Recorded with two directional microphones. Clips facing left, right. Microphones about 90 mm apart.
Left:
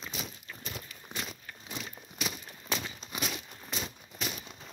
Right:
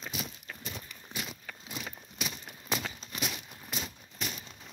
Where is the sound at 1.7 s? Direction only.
5° right (ahead or behind).